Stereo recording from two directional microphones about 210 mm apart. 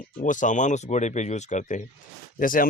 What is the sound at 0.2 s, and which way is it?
Speech, 35° left (ahead or behind).